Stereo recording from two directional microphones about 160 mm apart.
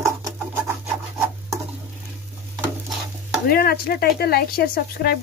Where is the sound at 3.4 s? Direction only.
70° left (ahead or behind).